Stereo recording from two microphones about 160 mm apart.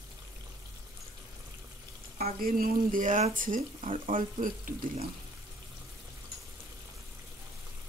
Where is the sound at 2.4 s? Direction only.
65° right (ahead or behind).